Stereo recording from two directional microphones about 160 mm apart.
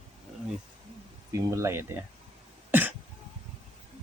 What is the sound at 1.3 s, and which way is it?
Speech, 20° right (ahead or behind).